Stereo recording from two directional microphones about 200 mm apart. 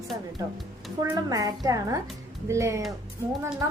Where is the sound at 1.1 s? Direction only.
20° right (ahead or behind).